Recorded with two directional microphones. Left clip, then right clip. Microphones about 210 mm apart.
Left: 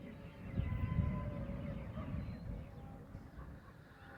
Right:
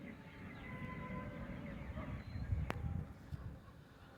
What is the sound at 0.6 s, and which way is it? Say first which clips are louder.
Vehicle: left 6 dB; 65° left (ahead or behind).